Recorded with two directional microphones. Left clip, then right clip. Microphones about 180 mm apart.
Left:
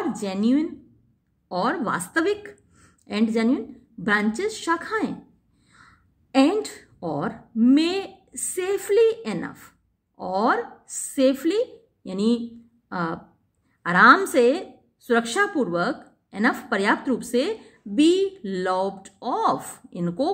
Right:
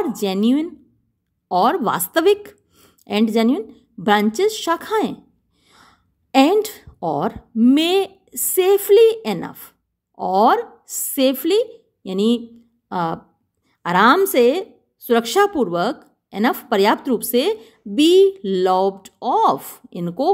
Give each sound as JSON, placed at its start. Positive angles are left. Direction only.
{"t": 0.0, "sound": "a woman's voice", "side_deg": -50}